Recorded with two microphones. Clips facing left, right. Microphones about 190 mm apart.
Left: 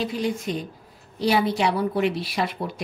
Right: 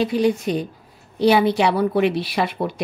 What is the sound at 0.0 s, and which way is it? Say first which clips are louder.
A woman's voice: right 7 dB; 65° right (ahead or behind).